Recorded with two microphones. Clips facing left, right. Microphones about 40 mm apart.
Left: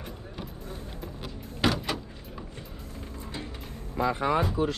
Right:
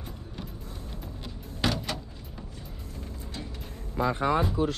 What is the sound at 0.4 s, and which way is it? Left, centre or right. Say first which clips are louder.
Music: left 1 dB; centre.